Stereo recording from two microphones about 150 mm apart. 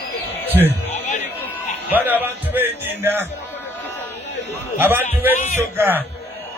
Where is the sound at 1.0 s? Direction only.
55° left (ahead or behind).